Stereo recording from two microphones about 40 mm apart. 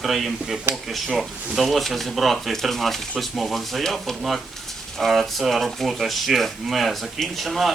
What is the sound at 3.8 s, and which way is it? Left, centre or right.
Speech, centre.